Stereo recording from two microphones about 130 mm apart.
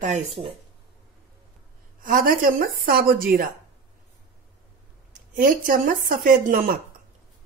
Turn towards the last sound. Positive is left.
turn(degrees=-90)